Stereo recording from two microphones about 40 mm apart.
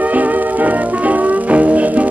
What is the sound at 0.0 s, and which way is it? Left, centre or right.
Music, right.